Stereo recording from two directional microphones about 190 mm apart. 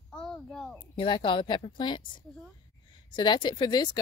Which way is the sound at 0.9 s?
25° left (ahead or behind).